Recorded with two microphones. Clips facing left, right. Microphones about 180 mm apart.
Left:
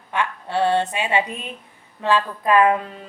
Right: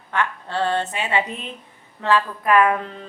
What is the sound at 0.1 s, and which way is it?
A woman's voice, 15° left (ahead or behind).